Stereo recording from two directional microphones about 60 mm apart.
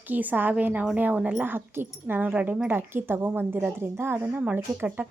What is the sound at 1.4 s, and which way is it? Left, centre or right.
Speech, right.